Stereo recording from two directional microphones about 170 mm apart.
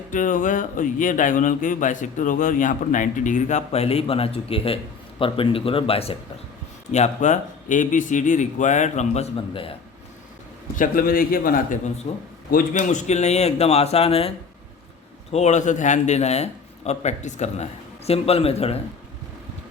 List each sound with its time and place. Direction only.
0.1 s a man's voice: 50° left (ahead or behind)
9.3 s a man's voice: 30° left (ahead or behind)
10.8 s a man's voice: 55° left (ahead or behind)
12.1 s a man's voice: 40° left (ahead or behind)
12.5 s a man's voice: 50° left (ahead or behind); by 18.8 s 35° left (ahead or behind)